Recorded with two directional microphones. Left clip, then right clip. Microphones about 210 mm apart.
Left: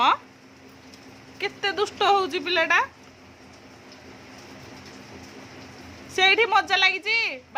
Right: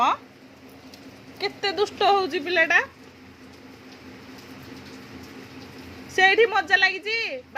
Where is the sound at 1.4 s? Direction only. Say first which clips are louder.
Right 1 dB; 5° left (ahead or behind).